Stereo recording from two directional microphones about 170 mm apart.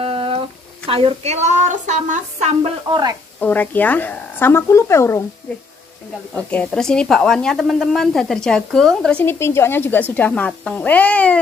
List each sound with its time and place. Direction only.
0.0 s a sound: 35° right (ahead or behind)
0.8 s a woman's voice: 35° right (ahead or behind)
2.9 s speech: 25° right (ahead or behind)
3.3 s a woman's voice: 10° left (ahead or behind)
6.3 s a woman's voice: 10° left (ahead or behind)